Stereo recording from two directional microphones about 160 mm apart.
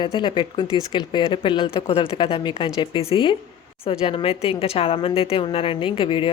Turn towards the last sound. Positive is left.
turn(degrees=30)  # may be behind; listen again after turning